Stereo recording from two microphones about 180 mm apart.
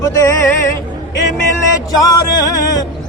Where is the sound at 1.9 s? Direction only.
20° left (ahead or behind).